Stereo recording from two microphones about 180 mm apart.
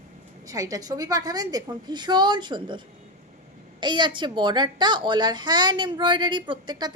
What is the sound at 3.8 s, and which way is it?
A child's voice, 25° right (ahead or behind).